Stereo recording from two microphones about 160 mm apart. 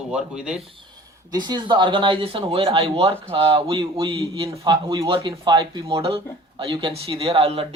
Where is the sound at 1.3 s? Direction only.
25° right (ahead or behind).